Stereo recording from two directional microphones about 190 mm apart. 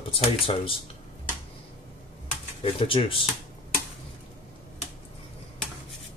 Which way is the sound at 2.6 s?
30° left (ahead or behind).